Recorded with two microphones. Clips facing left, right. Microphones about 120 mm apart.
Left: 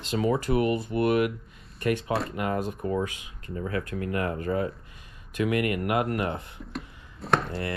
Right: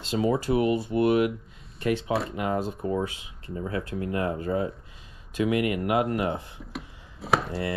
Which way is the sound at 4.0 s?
20° right (ahead or behind).